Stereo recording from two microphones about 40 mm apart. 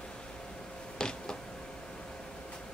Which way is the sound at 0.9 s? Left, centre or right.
Centre.